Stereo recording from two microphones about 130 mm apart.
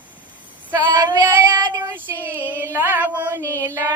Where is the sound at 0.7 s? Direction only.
30° right (ahead or behind).